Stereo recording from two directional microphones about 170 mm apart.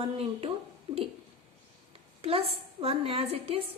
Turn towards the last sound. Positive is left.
turn(degrees=-35)  # may be behind; listen again after turning